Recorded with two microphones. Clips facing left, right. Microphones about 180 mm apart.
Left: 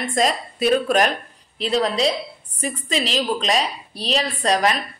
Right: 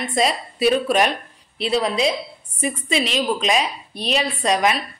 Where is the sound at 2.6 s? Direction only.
40° left (ahead or behind).